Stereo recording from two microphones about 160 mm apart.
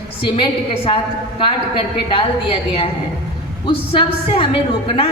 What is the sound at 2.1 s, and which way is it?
A woman's voice, 35° left (ahead or behind).